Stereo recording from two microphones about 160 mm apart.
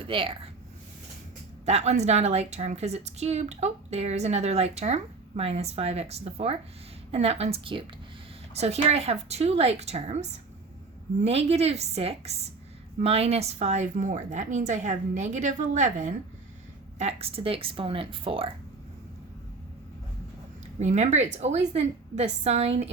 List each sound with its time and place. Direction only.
0.0 s speech: 35° right (ahead or behind)
1.6 s a woman's voice: 45° right (ahead or behind)
20.7 s a woman's voice: 45° right (ahead or behind)